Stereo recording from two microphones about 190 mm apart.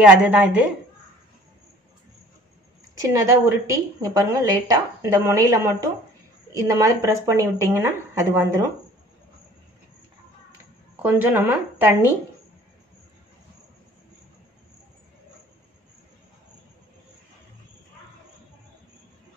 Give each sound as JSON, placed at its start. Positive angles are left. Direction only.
{"t": 0.0, "sound": "a woman's voice", "side_deg": -5}
{"t": 3.1, "sound": "a woman's voice", "side_deg": -15}
{"t": 11.0, "sound": "a woman's voice", "side_deg": -10}